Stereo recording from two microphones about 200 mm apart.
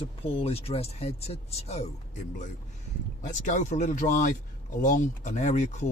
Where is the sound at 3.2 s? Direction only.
35° left (ahead or behind).